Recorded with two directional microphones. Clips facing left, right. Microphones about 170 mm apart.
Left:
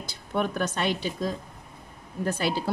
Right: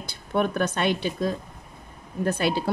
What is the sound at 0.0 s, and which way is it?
Speech, 55° right (ahead or behind).